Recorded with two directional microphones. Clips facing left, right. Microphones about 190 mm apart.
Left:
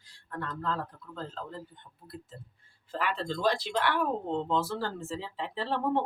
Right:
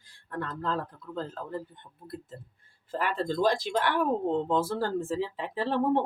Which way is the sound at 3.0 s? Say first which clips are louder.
Right 3 dB; 45° right (ahead or behind).